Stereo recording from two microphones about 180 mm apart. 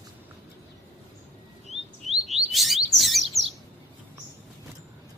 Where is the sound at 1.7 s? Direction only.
35° right (ahead or behind).